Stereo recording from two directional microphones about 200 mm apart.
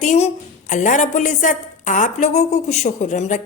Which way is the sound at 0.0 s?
35° left (ahead or behind).